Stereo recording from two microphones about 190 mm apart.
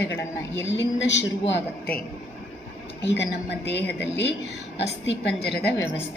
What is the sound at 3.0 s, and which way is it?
A woman's voice, 65° left (ahead or behind).